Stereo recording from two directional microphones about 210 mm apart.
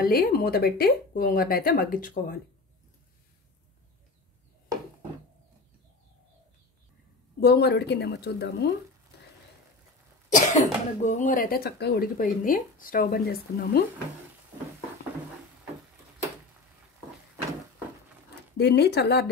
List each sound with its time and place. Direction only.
0.0 s speech: 45° left (ahead or behind)
7.3 s speech: 50° left (ahead or behind)
10.3 s speech: 35° left (ahead or behind)
18.6 s speech: 50° left (ahead or behind)